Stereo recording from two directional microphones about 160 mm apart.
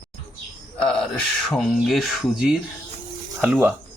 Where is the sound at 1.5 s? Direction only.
Centre (ahead or behind).